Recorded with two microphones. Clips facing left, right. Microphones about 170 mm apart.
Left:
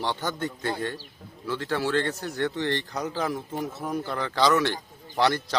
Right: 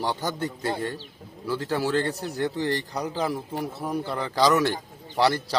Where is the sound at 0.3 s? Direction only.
35° right (ahead or behind).